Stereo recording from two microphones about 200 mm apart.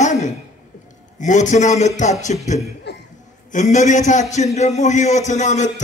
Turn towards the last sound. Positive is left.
turn(degrees=35)  # may be behind; listen again after turning